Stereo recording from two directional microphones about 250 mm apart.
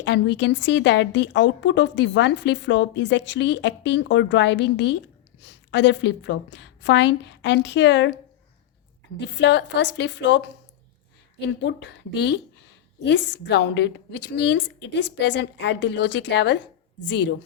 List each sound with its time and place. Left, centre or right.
0.0 s speech: left
9.1 s speech: left